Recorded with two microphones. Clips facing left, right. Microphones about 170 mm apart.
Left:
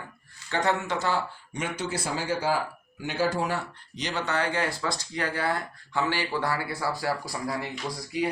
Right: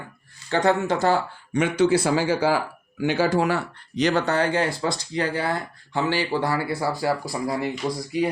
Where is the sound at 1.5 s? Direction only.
80° right; by 4.2 s 55° right (ahead or behind).